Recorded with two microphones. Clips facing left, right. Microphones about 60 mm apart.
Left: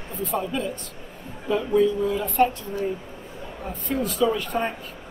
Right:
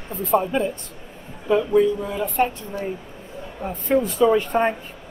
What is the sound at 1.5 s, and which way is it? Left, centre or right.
Speech, centre.